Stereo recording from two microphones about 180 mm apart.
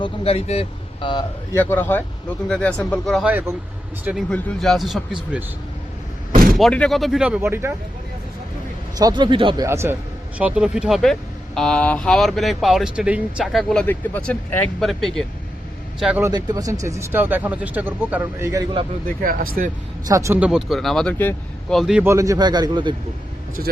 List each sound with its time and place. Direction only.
0.0 s speech: 35° left (ahead or behind)
1.5 s speech: 10° left (ahead or behind)
6.3 s vehicle: 55° right (ahead or behind)
6.6 s speech: 5° left (ahead or behind); by 7.7 s 15° right (ahead or behind)
9.0 s a man's voice: 25° right (ahead or behind)
9.6 s speech: 15° right (ahead or behind)
16.2 s speech: 20° right (ahead or behind)
19.0 s speech: 50° right (ahead or behind)
20.1 s speech: 15° right (ahead or behind); by 21.8 s 10° left (ahead or behind)
21.8 s speech: 5° right (ahead or behind)
22.1 s a man's voice: 20° right (ahead or behind)